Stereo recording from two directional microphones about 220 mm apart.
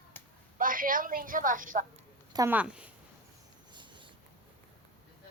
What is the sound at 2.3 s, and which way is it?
Speech, 10° right (ahead or behind).